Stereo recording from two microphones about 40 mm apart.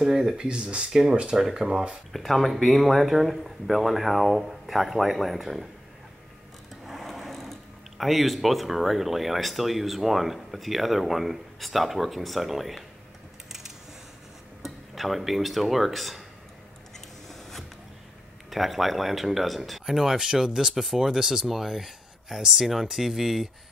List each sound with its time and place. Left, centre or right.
0.0 s speech: centre
2.1 s speech: centre
6.9 s sewing machine: centre
8.0 s speech: centre
13.5 s a sound: centre
14.6 s speech: centre
17.3 s a sound: centre
18.5 s speech: centre